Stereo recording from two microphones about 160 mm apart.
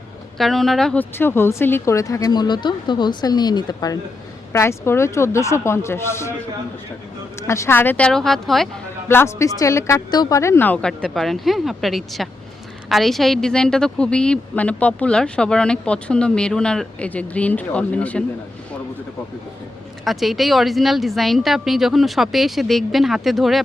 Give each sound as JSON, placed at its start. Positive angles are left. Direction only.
{"t": 0.3, "sound": "a woman's voice", "side_deg": 0}
{"t": 1.2, "sound": "speech", "side_deg": 15}
{"t": 7.4, "sound": "speech", "side_deg": 20}
{"t": 9.0, "sound": "a woman's voice", "side_deg": 15}
{"t": 20.1, "sound": "a woman's voice", "side_deg": 0}